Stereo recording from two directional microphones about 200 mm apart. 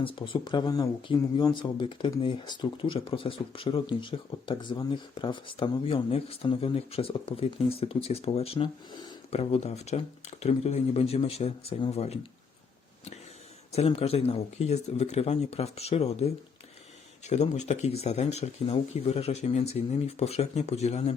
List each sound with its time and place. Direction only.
0.0 s speech: 25° left (ahead or behind)
9.3 s speech: 30° left (ahead or behind)
13.7 s speech: 30° left (ahead or behind)